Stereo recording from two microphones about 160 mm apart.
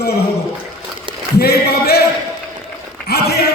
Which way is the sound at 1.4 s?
80° left.